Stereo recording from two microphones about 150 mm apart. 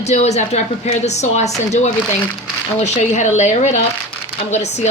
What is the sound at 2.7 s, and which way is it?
Speech, 50° left (ahead or behind).